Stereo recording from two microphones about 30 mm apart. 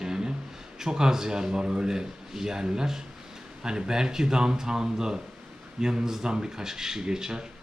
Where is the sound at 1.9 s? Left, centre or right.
Centre.